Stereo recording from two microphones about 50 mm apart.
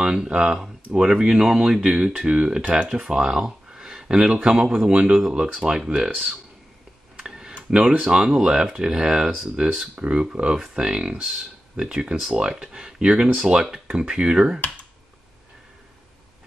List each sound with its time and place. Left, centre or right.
0.0 s speech: centre
2.6 s speech: right
2.9 s speech: centre
5.5 s speech: centre
7.2 s tick-tock: centre
8.0 s speech: centre